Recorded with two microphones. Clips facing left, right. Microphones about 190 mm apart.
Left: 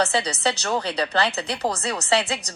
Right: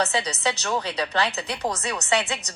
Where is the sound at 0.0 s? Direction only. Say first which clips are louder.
Left 2 dB; 35° left (ahead or behind).